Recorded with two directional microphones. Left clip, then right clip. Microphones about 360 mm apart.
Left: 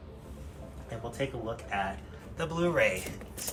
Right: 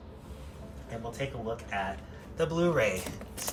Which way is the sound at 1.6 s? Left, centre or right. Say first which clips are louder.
Left 1 dB; centre.